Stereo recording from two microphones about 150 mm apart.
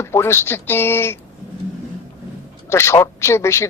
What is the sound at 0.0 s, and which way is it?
Speech, 15° left (ahead or behind).